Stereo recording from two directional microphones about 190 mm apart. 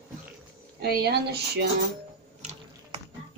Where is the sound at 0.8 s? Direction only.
55° right (ahead or behind).